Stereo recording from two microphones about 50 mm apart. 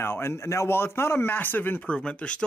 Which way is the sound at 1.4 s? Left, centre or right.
Left.